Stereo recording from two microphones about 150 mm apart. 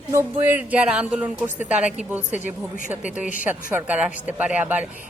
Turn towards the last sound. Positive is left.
turn(degrees=-10)  # may be behind; listen again after turning